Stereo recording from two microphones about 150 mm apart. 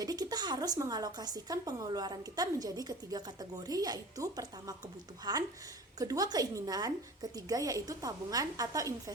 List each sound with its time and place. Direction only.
0.0 s a woman's voice: 25° right (ahead or behind)